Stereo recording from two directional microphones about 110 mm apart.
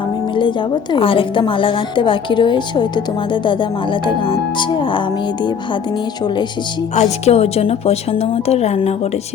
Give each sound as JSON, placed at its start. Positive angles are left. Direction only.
{"t": 0.3, "sound": "a woman's voice", "side_deg": 45}
{"t": 6.9, "sound": "a woman's voice", "side_deg": 80}